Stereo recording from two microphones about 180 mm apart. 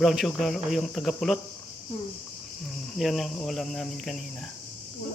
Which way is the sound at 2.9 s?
Centre (ahead or behind).